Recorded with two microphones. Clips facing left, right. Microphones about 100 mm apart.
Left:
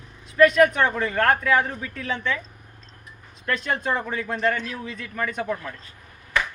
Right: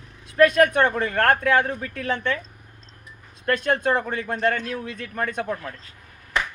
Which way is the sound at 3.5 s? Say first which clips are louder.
Right 4 dB; 55° right (ahead or behind).